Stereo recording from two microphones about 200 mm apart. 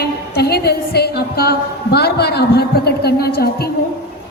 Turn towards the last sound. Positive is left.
turn(degrees=50)  # may be behind; listen again after turning